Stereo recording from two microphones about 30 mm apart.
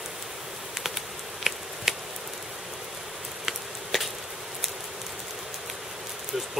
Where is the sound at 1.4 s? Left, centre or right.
Centre.